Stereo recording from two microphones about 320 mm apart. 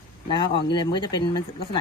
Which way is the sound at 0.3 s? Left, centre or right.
Centre.